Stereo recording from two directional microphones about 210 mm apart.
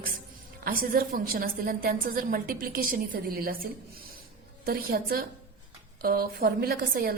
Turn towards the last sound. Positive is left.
turn(degrees=-45)  # may be behind; listen again after turning